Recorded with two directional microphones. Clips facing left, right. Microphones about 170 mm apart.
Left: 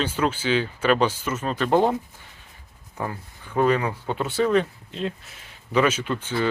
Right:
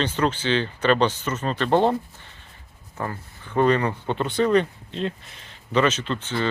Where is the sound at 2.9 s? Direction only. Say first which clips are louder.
Even; 10° left (ahead or behind).